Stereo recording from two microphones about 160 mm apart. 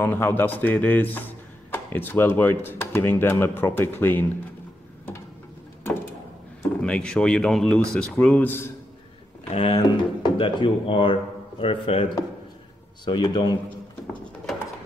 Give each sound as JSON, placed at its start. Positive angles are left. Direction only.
{"t": 0.0, "sound": "speech", "side_deg": 15}
{"t": 6.8, "sound": "speech", "side_deg": 5}
{"t": 9.5, "sound": "speech", "side_deg": 40}